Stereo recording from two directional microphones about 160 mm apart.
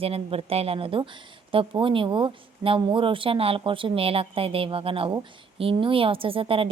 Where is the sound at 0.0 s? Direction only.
35° right (ahead or behind).